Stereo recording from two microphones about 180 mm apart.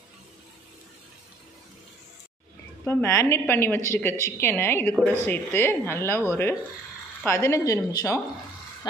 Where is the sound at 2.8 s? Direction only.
10° left (ahead or behind).